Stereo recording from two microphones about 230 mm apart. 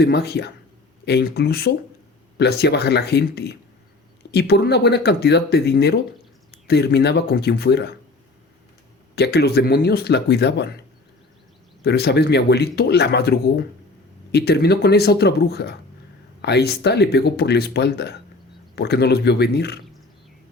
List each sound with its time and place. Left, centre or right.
0.0 s speech: left
9.1 s speech: left
11.8 s speech: left